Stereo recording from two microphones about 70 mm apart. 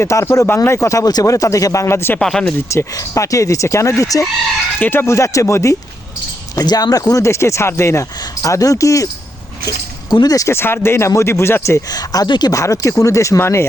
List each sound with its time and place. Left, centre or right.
0.0 s speech: left
0.4 s speech: left
2.1 s speech: centre
2.6 s speech: left
4.8 s speech: left
5.0 s speech: left
6.6 s speech: left
7.3 s speech: left
8.2 s speech: left
9.6 s speech: left
10.4 s speech: left
11.9 s speech: left
12.5 s speech: left